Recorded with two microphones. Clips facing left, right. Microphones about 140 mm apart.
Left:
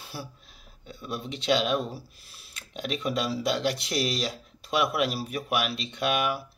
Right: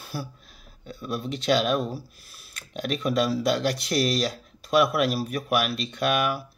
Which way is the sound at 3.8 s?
40° right (ahead or behind).